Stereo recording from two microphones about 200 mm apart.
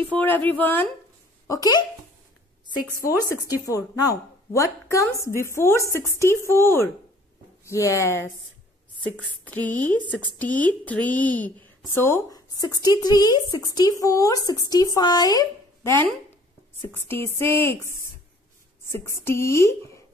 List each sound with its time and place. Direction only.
0.1 s a woman's voice: 10° left (ahead or behind)
3.1 s a woman's voice: 15° left (ahead or behind)
18.9 s music: 15° left (ahead or behind)
19.2 s a woman's voice: 15° left (ahead or behind)